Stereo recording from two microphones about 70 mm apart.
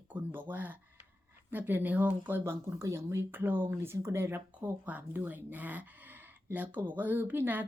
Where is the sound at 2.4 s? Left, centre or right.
Right.